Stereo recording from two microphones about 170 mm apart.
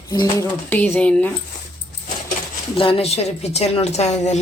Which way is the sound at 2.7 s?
30° left (ahead or behind).